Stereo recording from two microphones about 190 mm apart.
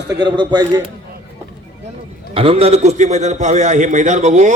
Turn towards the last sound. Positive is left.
turn(degrees=-40)  # may be behind; listen again after turning